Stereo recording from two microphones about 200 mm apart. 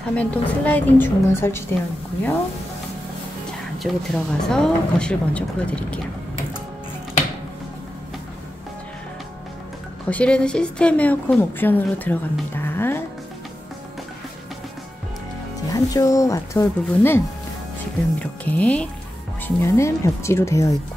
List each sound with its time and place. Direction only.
0.0 s a woman's voice: 5° left (ahead or behind)
3.8 s speech: centre (ahead or behind)
10.0 s a woman's voice: 5° left (ahead or behind)
15.7 s a woman's voice: 15° left (ahead or behind)
18.2 s a woman's voice: 5° left (ahead or behind)